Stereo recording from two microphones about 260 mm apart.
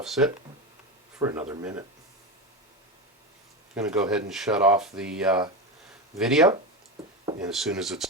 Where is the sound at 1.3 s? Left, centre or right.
Centre.